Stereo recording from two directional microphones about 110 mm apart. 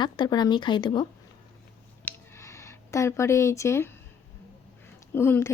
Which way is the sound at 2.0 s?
25° left (ahead or behind).